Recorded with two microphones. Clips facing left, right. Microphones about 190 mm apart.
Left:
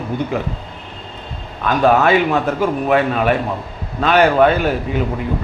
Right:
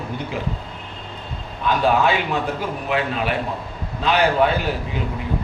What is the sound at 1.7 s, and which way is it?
A man's voice, 50° left (ahead or behind).